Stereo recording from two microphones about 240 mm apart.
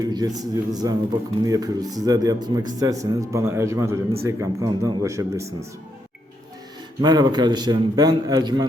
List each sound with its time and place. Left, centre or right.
0.0 s speech: centre
7.0 s speech: centre